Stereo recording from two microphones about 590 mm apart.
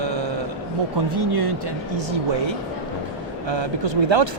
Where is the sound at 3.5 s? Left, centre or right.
Right.